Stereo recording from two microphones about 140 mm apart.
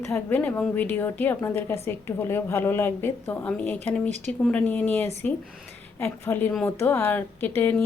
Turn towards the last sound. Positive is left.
turn(degrees=15)  # may be behind; listen again after turning